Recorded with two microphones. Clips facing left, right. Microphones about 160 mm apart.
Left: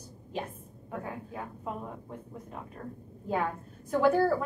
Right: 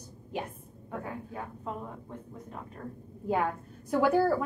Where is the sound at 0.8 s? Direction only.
10° left (ahead or behind).